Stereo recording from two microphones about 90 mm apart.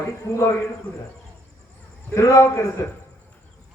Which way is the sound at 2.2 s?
35° left (ahead or behind).